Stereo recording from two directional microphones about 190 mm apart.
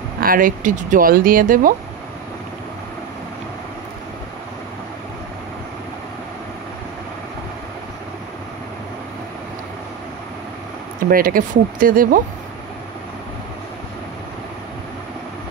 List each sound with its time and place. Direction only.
0.2 s speech: 50° right (ahead or behind)
11.1 s speech: 50° right (ahead or behind)